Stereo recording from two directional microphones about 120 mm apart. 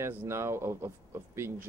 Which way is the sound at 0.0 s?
20° right (ahead or behind).